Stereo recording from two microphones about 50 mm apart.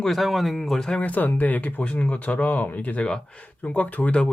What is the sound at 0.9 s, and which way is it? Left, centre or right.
Speech, left.